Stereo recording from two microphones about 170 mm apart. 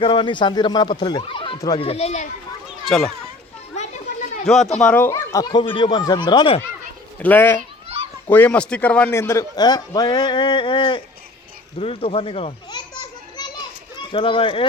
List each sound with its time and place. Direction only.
0.0 s a man's voice: 30° left (ahead or behind)
2.6 s children playing: centre (ahead or behind)
3.8 s children playing: 45° left (ahead or behind)
4.4 s a man's voice: centre (ahead or behind); by 6.6 s 25° left (ahead or behind)
7.2 s a child's voice: 10° left (ahead or behind); by 11.0 s 30° left (ahead or behind)
11.8 s children playing: 35° left (ahead or behind)
13.9 s speech: 30° left (ahead or behind)